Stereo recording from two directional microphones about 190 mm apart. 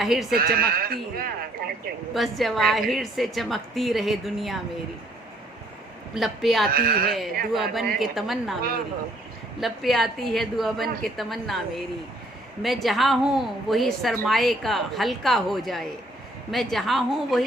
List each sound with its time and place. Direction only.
0.0 s a woman's voice: centre (ahead or behind)
0.3 s speech: 50° right (ahead or behind)
2.1 s a woman's voice: centre (ahead or behind)
6.1 s a woman's voice: centre (ahead or behind)
6.7 s speech: 50° right (ahead or behind)
7.5 s a woman's voice: centre (ahead or behind)
9.6 s a woman's voice: centre (ahead or behind)